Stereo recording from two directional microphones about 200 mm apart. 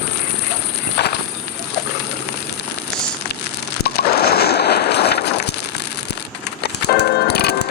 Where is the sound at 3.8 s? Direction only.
50° left (ahead or behind).